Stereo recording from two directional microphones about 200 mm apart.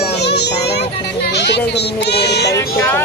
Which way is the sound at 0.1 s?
55° left (ahead or behind).